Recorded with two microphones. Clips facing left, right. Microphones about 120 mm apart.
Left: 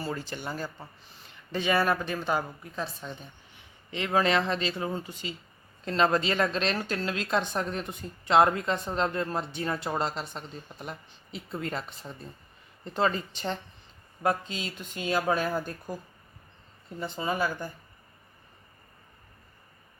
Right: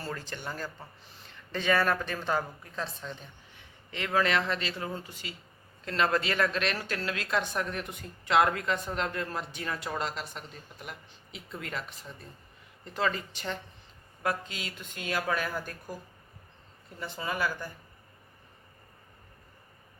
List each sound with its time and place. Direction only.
0.0 s a woman's voice: 10° left (ahead or behind)
3.9 s a woman's voice: 20° left (ahead or behind)
17.0 s a woman's voice: 25° left (ahead or behind)